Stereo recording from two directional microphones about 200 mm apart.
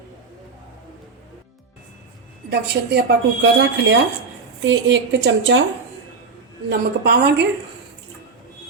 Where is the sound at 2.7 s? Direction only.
55° right (ahead or behind).